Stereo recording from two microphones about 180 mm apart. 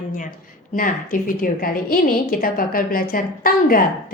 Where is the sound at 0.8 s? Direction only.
50° left (ahead or behind).